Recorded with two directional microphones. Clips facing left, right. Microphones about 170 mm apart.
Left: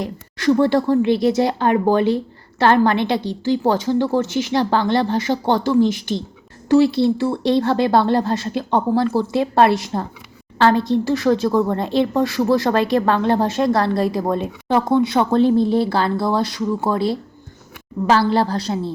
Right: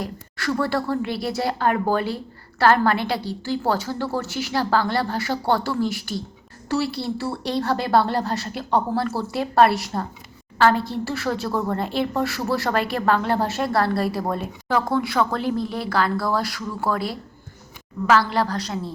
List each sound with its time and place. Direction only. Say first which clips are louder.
0.0 s a woman's voice: left 8 dB; 20° left (ahead or behind)